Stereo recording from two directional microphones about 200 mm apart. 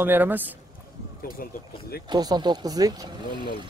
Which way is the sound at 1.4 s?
45° left (ahead or behind).